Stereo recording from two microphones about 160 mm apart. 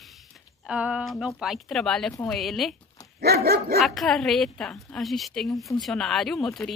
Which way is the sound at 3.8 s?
Centre (ahead or behind).